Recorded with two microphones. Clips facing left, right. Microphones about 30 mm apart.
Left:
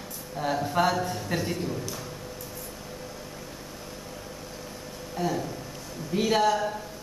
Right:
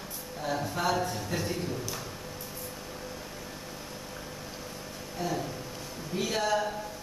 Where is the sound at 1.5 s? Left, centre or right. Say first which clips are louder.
Left 2 dB; centre.